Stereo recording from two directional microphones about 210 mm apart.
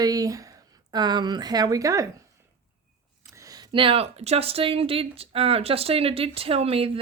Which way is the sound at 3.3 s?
15° right (ahead or behind).